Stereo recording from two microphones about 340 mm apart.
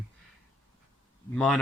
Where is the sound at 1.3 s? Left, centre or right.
Centre.